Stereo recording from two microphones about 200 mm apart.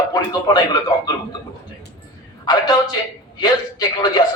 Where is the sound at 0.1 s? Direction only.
20° left (ahead or behind).